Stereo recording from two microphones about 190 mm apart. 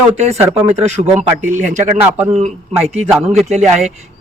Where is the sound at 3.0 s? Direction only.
Centre (ahead or behind).